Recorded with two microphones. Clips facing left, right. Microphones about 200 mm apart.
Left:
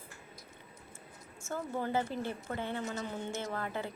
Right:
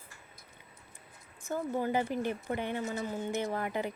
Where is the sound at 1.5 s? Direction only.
15° right (ahead or behind).